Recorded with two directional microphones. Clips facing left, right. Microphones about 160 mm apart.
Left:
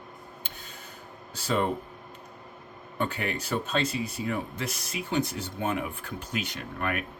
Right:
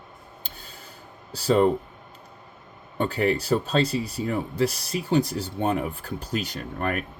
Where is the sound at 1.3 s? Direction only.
35° right (ahead or behind).